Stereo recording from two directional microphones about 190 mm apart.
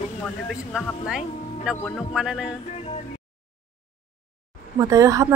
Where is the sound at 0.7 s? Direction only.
Centre (ahead or behind).